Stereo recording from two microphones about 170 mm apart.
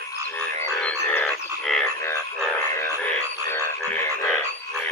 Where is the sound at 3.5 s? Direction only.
15° left (ahead or behind).